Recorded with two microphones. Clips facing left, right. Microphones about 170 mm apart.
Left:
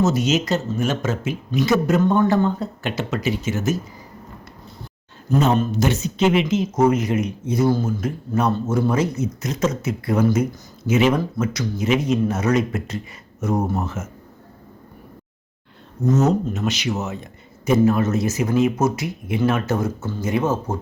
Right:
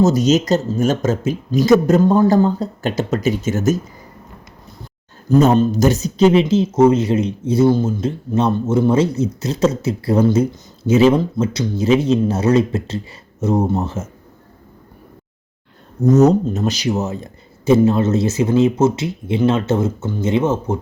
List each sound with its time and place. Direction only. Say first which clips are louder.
0.0 s speech: right 5 dB; 40° right (ahead or behind)
5.3 s speech: right 6 dB; 35° right (ahead or behind)
16.0 s speech: right 6 dB; 40° right (ahead or behind); by 20.7 s 20° right (ahead or behind)